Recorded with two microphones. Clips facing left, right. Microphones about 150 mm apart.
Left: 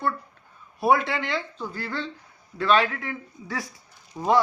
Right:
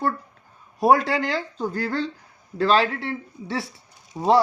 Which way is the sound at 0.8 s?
40° right (ahead or behind).